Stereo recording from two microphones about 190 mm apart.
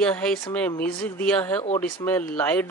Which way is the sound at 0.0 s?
5° left (ahead or behind).